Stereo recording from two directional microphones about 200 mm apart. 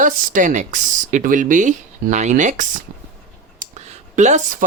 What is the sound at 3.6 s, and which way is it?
Clicking, 40° right (ahead or behind).